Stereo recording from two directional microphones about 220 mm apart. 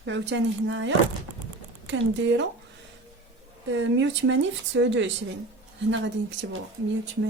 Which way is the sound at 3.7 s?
60° right (ahead or behind).